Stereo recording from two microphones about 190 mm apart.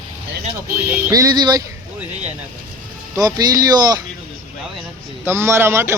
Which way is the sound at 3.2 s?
20° right (ahead or behind).